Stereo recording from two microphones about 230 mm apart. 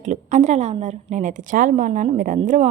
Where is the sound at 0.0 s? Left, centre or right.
Right.